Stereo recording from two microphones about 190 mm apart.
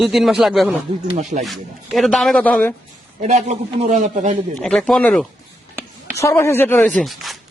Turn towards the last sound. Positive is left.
turn(degrees=0)  # may be behind; listen again after turning